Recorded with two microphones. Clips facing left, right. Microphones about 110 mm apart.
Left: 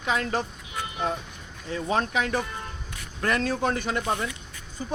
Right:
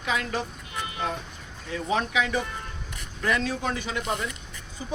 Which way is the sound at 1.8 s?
45° left (ahead or behind).